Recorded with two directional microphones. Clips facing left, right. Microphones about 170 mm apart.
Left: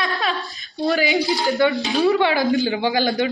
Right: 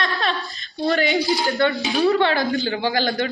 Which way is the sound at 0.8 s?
Centre (ahead or behind).